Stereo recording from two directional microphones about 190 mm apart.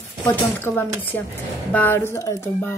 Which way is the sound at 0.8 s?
10° right (ahead or behind).